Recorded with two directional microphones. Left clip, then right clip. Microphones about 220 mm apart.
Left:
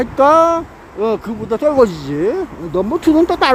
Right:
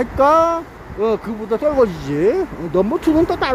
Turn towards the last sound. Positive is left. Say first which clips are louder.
# left 4 dB
turn(degrees=15)  # may be behind; listen again after turning